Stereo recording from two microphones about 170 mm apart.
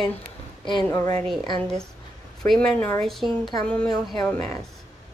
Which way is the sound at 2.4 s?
5° left (ahead or behind).